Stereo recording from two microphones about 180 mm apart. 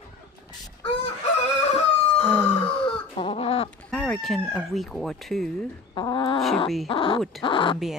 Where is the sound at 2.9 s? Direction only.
30° left (ahead or behind).